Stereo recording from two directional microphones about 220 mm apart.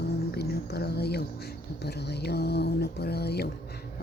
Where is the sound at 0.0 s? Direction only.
45° left (ahead or behind).